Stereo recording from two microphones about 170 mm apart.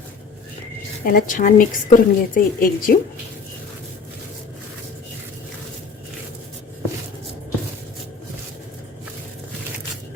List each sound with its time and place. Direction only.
1.0 s a woman's voice: 55° left (ahead or behind)